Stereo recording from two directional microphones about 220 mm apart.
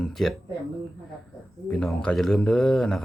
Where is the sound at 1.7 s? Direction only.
5° left (ahead or behind).